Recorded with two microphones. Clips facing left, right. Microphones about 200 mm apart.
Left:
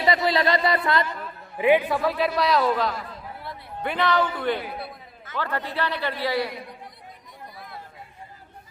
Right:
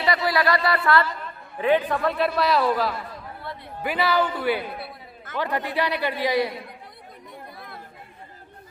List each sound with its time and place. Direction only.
0.0 s a man's voice: 25° left (ahead or behind); by 6.5 s 15° right (ahead or behind)